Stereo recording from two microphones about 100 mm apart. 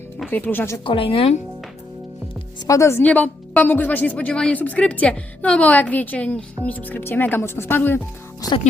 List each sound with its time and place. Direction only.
0.3 s speech: 20° left (ahead or behind)
0.9 s a woman's voice: 65° left (ahead or behind)
2.6 s speech: 30° left (ahead or behind)
3.0 s speech: 15° left (ahead or behind)